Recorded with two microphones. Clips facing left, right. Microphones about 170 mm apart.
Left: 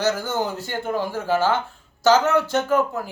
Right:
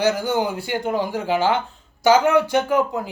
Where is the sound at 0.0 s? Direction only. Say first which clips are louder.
Right 3 dB; 15° right (ahead or behind).